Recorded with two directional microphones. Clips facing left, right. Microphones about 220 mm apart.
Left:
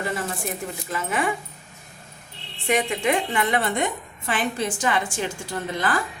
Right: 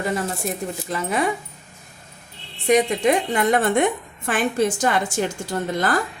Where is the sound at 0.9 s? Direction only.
40° right (ahead or behind).